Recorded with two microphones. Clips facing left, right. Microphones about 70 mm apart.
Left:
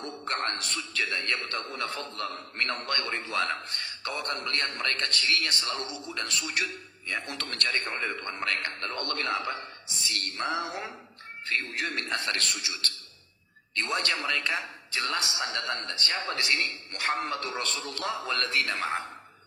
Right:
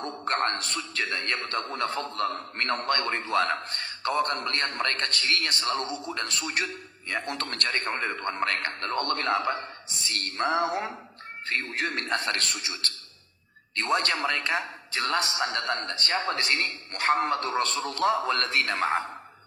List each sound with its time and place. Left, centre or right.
0.0 s a man's voice: right